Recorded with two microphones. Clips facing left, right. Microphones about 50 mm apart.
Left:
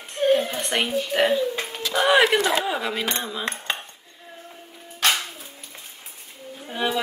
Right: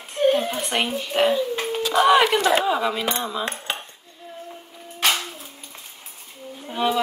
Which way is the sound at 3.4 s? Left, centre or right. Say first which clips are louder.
Even; left.